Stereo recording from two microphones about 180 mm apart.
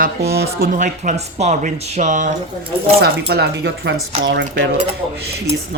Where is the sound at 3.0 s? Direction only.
65° right (ahead or behind).